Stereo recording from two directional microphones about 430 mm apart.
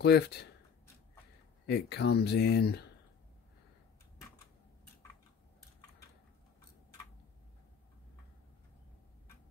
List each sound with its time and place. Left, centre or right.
0.0 s speech: left
1.7 s speech: left